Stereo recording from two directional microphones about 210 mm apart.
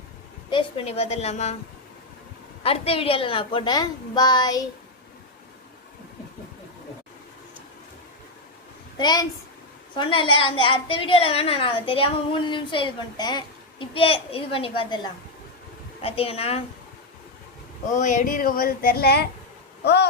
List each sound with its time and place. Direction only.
0.5 s a woman's voice: 25° left (ahead or behind)
2.6 s a woman's voice: 25° left (ahead or behind)
9.0 s a woman's voice: 20° left (ahead or behind)
17.9 s speech: 35° left (ahead or behind); by 20.1 s 50° left (ahead or behind)